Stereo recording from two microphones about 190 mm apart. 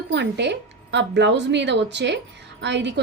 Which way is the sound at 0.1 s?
65° right (ahead or behind).